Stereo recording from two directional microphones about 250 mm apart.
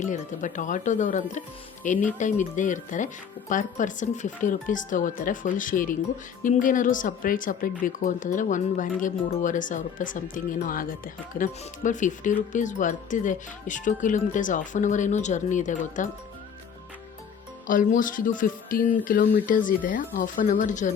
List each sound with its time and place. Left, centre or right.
0.0 s speech: left
17.7 s speech: left